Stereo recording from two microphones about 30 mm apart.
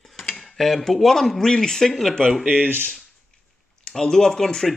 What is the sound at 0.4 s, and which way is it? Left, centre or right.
Speech, centre.